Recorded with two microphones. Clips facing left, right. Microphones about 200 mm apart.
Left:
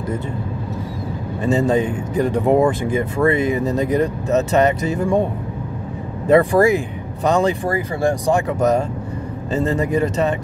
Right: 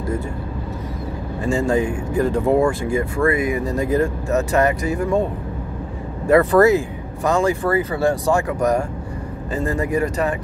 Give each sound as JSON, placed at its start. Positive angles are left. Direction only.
{"t": 1.4, "sound": "speech", "side_deg": 20}
{"t": 6.2, "sound": "speech", "side_deg": 15}